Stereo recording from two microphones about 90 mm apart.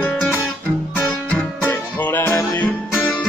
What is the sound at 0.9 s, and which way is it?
Music, 20° left (ahead or behind).